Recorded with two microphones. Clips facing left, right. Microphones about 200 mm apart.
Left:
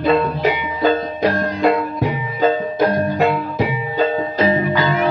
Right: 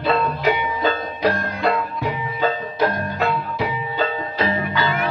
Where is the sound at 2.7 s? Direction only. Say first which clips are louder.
Left 5 dB; 50° left (ahead or behind).